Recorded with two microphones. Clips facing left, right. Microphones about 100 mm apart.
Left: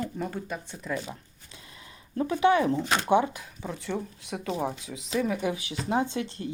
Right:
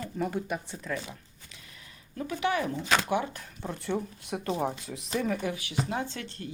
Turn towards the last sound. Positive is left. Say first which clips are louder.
# left 7 dB
turn(degrees=15)  # may be behind; listen again after turning